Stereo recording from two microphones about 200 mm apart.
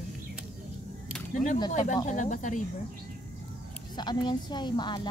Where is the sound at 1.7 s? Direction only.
40° left (ahead or behind).